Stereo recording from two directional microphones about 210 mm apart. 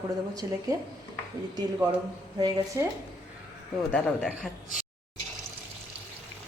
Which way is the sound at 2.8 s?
15° right (ahead or behind).